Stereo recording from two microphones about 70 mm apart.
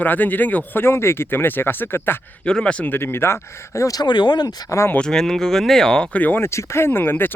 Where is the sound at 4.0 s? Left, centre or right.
Left.